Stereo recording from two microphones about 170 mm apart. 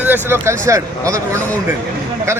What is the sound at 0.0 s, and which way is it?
A man's voice, 15° right (ahead or behind).